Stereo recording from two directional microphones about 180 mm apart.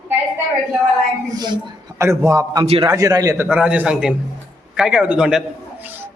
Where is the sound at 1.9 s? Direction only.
15° right (ahead or behind).